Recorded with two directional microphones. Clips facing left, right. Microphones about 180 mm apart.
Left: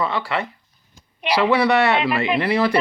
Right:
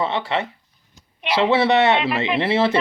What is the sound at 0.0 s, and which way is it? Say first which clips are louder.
Speech: right 1 dB; 20° right (ahead or behind).